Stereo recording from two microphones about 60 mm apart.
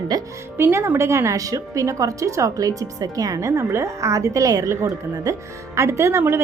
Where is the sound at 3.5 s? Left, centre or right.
Right.